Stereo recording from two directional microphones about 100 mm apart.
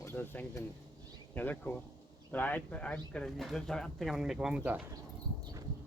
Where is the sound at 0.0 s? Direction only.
25° left (ahead or behind); by 4.8 s 15° right (ahead or behind).